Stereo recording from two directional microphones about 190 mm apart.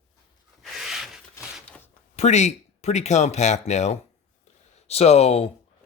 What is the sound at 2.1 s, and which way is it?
Speech, 35° left (ahead or behind).